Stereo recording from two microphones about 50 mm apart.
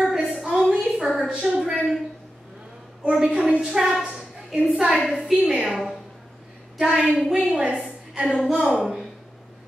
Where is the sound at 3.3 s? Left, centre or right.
Centre.